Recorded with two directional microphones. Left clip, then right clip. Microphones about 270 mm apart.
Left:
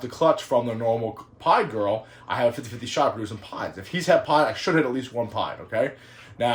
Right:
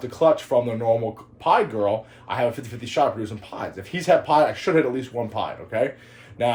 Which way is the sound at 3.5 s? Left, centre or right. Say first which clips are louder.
Even; centre.